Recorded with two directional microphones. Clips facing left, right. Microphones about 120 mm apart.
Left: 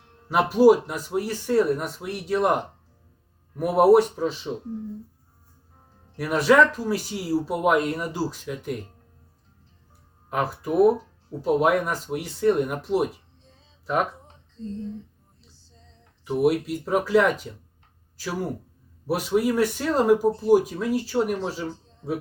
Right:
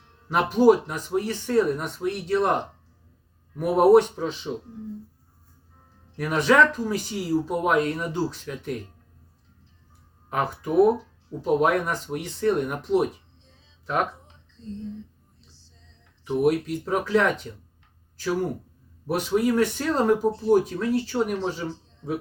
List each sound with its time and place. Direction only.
0.3 s speech: 5° left (ahead or behind)
6.1 s speech: 5° left (ahead or behind)
10.2 s speech: centre (ahead or behind)
14.6 s speech: 45° left (ahead or behind)
16.2 s speech: 5° left (ahead or behind)